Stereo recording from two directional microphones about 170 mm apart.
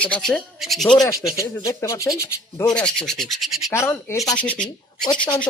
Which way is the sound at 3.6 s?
15° left (ahead or behind).